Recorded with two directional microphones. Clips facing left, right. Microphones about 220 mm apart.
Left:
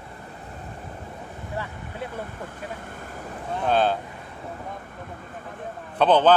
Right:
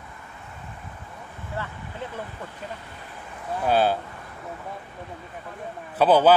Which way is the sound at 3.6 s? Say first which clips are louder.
Right 1 dB; 5° right (ahead or behind).